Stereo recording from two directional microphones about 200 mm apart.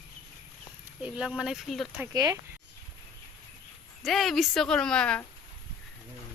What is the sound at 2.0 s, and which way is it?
Speech, 15° right (ahead or behind).